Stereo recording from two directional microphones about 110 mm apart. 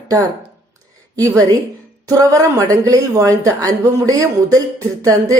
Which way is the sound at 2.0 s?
30° right (ahead or behind).